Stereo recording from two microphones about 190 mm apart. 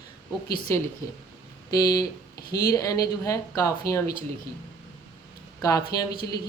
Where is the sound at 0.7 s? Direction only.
15° left (ahead or behind).